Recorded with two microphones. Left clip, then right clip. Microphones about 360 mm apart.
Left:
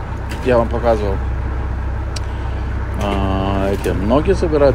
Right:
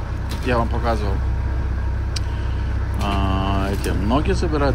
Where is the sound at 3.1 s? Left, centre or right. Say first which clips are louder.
Left 3 dB; left.